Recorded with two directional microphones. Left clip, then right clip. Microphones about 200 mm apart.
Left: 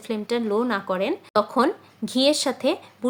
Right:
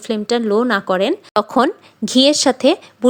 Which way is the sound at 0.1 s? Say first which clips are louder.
Right 8 dB; 30° right (ahead or behind).